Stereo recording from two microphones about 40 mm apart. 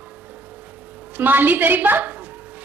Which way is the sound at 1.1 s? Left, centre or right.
Right.